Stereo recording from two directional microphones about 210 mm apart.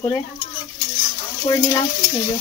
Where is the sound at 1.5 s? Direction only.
15° left (ahead or behind).